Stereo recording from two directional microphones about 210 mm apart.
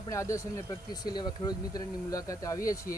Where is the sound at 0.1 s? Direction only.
15° left (ahead or behind).